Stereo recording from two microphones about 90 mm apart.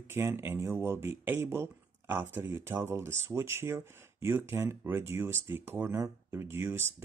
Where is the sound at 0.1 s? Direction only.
25° right (ahead or behind).